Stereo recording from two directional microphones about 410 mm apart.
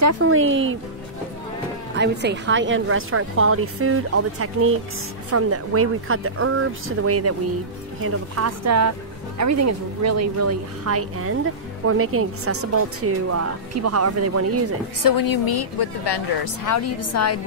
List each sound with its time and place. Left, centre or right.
0.0 s speech: right
2.0 s a woman's voice: right
15.0 s a woman's voice: left
16.6 s a woman's voice: left